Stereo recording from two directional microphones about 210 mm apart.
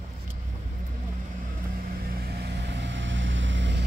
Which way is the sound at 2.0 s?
50° right (ahead or behind).